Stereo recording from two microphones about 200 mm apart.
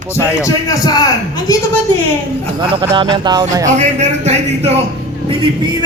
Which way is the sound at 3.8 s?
35° right (ahead or behind).